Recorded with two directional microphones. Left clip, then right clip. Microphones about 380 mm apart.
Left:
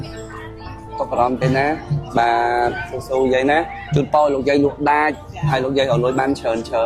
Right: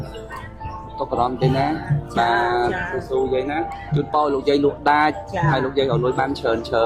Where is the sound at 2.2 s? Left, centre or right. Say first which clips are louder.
Left 2 dB; left.